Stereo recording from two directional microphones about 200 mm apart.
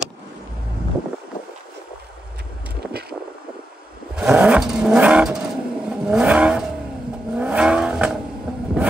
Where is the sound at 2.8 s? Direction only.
50° right (ahead or behind).